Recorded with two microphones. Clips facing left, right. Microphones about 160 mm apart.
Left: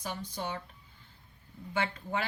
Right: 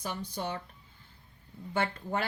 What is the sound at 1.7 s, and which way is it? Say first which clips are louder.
Speech: right 2 dB; 50° right (ahead or behind).